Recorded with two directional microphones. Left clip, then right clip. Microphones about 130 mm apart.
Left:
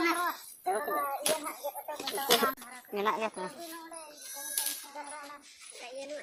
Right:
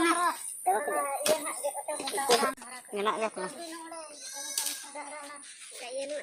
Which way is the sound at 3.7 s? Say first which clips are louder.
Right 3 dB; 50° right (ahead or behind).